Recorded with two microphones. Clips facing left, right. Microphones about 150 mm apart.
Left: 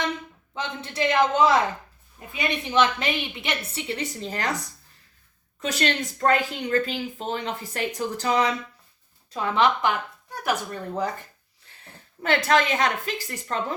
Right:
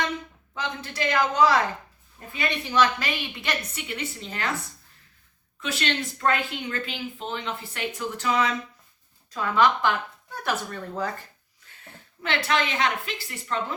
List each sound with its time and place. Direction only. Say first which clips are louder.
0.5 s a woman's voice: left 1 dB; 25° left (ahead or behind)
10.4 s speech: left 2 dB; 15° left (ahead or behind)
12.2 s speech: left 4 dB; 45° left (ahead or behind)